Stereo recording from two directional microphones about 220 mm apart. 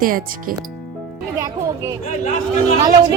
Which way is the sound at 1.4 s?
15° right (ahead or behind).